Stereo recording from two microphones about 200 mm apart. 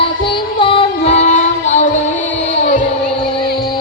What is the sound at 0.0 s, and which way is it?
Music, 25° left (ahead or behind).